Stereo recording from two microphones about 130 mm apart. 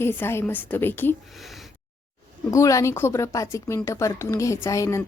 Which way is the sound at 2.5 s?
25° left (ahead or behind).